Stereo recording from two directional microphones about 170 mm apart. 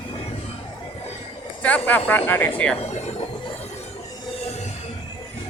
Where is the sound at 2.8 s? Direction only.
40° left (ahead or behind).